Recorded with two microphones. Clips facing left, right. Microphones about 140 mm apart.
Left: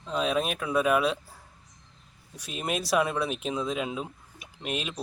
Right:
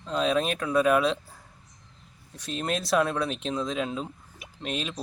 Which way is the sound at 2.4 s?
10° left (ahead or behind).